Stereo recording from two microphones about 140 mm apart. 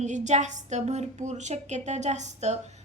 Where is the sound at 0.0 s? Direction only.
55° right (ahead or behind).